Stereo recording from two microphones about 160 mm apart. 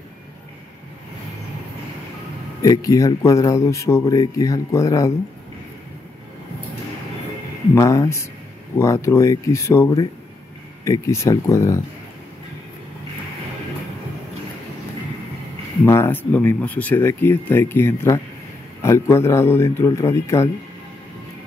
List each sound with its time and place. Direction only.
2.6 s speech: 20° left (ahead or behind)
7.7 s speech: 20° left (ahead or behind)
15.8 s speech: 15° left (ahead or behind)